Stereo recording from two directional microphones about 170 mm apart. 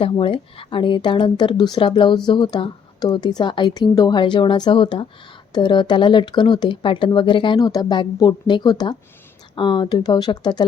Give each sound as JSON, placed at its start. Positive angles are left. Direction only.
{"t": 0.0, "sound": "speech", "side_deg": 30}